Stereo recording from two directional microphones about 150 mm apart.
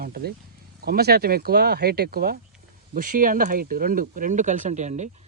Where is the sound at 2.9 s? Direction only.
65° right (ahead or behind).